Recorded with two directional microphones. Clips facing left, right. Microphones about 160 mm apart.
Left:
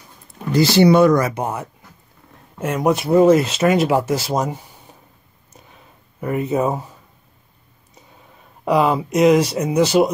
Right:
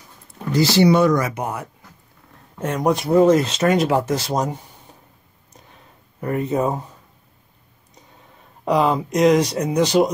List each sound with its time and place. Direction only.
0.6 s speech: 55° left (ahead or behind)
1.3 s speech: 25° left (ahead or behind)
2.6 s speech: 5° left (ahead or behind)
4.9 s a sound: 5° left (ahead or behind)
6.2 s speech: 5° left (ahead or behind)
8.6 s speech: 5° left (ahead or behind)